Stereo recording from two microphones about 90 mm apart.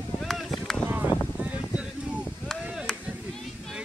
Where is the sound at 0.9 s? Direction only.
20° right (ahead or behind).